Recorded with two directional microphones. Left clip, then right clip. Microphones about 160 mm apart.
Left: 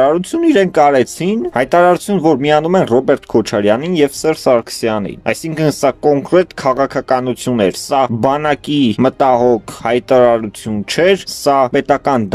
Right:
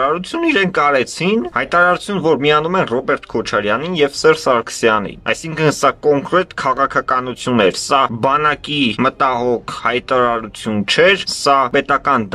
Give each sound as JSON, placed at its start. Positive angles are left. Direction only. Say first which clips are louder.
{"t": 0.0, "sound": "speech", "louder": "left 4 dB", "side_deg": 45}